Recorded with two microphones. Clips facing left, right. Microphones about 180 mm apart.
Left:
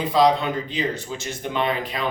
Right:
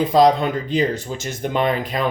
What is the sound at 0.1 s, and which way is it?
Speech, 45° right (ahead or behind).